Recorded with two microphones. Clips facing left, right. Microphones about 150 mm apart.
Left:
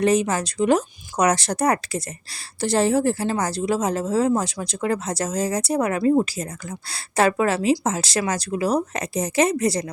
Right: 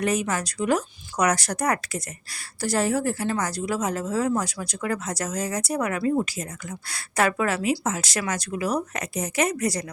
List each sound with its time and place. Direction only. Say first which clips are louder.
0.0 s a woman's voice: left 5 dB; 30° left (ahead or behind)